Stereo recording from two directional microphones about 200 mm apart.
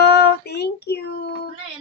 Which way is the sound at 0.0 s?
55° left (ahead or behind).